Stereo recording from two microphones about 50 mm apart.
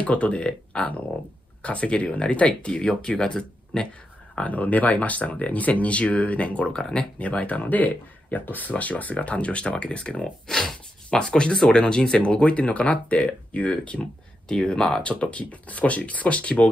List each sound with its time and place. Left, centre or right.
0.0 s speech: left
4.4 s speech: left
6.8 s speech: centre
7.2 s speech: left
10.5 s speech: centre; by 16.6 s left